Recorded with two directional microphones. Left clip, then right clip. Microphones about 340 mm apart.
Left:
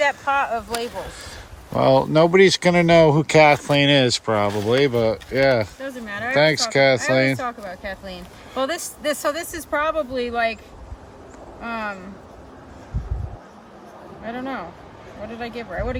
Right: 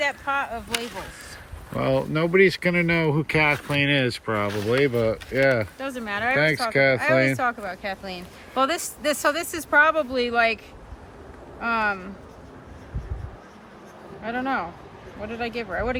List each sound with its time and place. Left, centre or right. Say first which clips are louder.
0.0 s speech: left 5 dB; left
1.7 s speech: left 8 dB; centre
11.6 s speech: right 5 dB; centre
14.3 s speech: right 3 dB; centre